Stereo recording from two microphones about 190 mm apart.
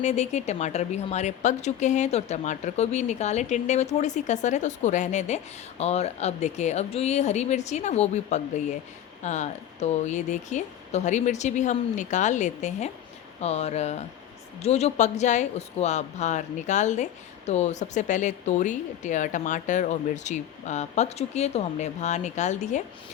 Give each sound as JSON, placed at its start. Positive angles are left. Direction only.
{"t": 0.0, "sound": "a woman's voice", "side_deg": 35}